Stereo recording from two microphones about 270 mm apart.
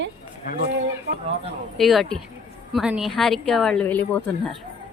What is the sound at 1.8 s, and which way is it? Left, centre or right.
Speech, centre.